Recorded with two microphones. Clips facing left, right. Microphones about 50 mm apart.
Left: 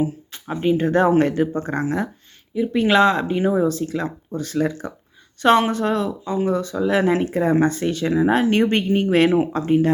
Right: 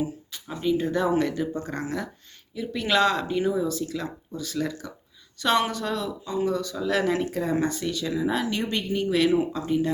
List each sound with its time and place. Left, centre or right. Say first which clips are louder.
0.0 s speech: left 7 dB; left